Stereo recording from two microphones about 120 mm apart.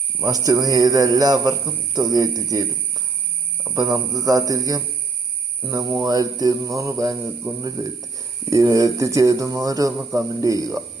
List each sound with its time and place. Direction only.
0.2 s a man's voice: 30° right (ahead or behind)
3.9 s a sound: 30° right (ahead or behind)
5.6 s a man's voice: 30° right (ahead or behind)